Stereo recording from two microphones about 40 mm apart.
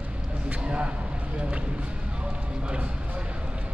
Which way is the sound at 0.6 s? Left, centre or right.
Right.